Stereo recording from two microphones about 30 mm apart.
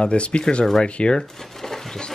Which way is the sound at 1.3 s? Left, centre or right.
Centre.